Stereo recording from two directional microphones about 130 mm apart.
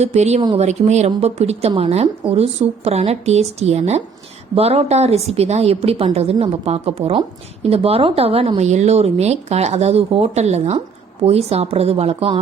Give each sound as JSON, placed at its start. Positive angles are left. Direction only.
{"t": 0.0, "sound": "a woman's voice", "side_deg": -60}